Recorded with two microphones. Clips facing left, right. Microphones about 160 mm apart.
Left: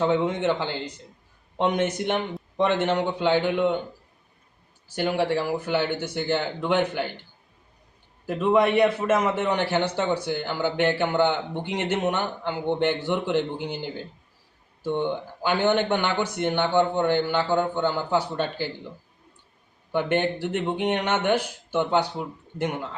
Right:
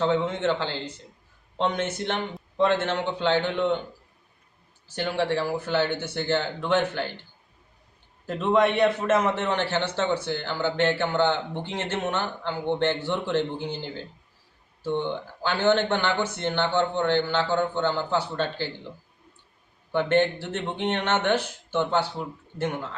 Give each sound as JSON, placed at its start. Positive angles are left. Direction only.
{"t": 0.0, "sound": "a man's voice", "side_deg": 15}
{"t": 4.9, "sound": "a man's voice", "side_deg": 10}
{"t": 8.3, "sound": "a man's voice", "side_deg": 10}
{"t": 19.9, "sound": "a man's voice", "side_deg": 10}